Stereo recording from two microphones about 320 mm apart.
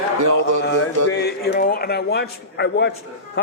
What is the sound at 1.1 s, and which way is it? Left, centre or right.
A man's voice, left.